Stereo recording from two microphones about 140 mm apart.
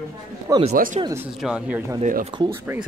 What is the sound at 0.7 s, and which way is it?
Speech, 85° right.